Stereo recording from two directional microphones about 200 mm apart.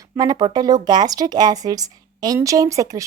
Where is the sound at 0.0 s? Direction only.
20° right (ahead or behind).